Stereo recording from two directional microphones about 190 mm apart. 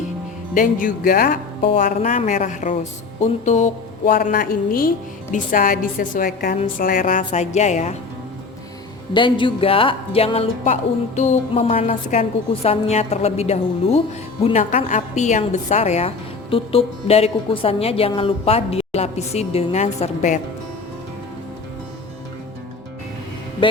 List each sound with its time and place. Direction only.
0.5 s a woman's voice: 45° left (ahead or behind)
1.7 s a woman's voice: 40° left (ahead or behind)
9.1 s a woman's voice: 25° left (ahead or behind)